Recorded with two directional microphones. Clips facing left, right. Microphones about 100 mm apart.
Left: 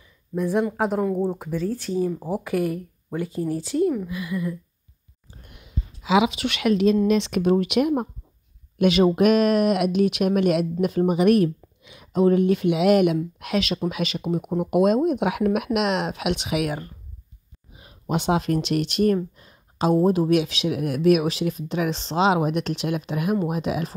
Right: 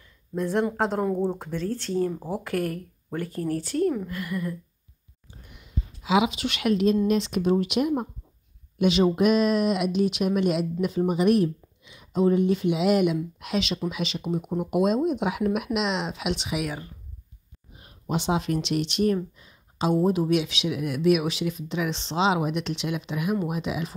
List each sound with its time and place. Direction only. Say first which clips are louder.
0.4 s speech: left 2 dB; 10° left (ahead or behind)
6.0 s speech: left 3 dB; 90° left
7.1 s speech: left 3 dB; 75° left (ahead or behind)
18.0 s speech: left 3 dB; 55° left (ahead or behind)